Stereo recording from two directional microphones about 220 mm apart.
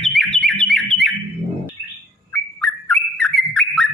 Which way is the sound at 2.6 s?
5° left (ahead or behind).